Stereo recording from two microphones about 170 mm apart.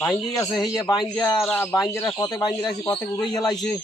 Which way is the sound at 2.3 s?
20° left (ahead or behind).